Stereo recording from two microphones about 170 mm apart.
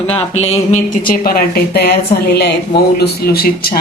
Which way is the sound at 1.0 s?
60° left (ahead or behind).